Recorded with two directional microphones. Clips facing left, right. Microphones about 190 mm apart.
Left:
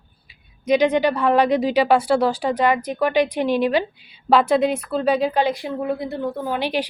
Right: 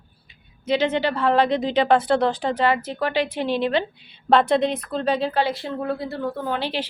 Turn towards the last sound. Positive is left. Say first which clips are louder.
# left 3 dB
turn(degrees=15)  # may be behind; listen again after turning